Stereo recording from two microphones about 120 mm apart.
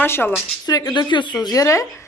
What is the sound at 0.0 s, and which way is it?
Speech, 15° left (ahead or behind).